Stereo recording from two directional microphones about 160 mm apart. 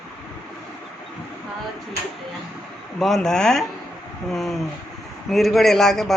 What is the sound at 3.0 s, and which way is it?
A man's voice, centre (ahead or behind).